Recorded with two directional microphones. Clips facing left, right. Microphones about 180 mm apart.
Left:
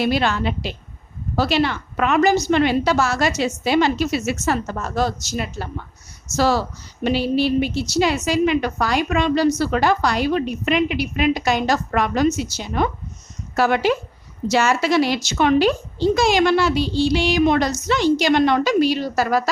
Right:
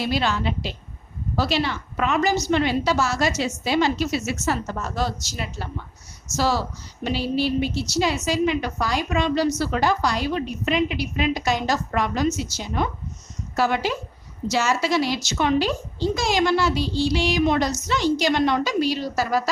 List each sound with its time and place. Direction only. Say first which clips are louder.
0.0 s a woman's voice: left 4 dB; 60° left (ahead or behind)